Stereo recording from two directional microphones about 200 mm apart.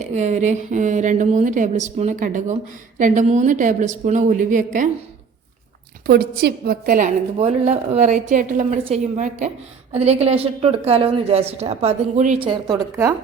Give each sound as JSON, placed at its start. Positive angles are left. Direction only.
{"t": 0.0, "sound": "a woman's voice", "side_deg": -35}
{"t": 6.1, "sound": "a woman's voice", "side_deg": -55}
{"t": 7.3, "sound": "a woman's voice", "side_deg": -35}